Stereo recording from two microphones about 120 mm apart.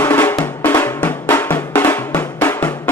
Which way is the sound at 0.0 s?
20° left (ahead or behind).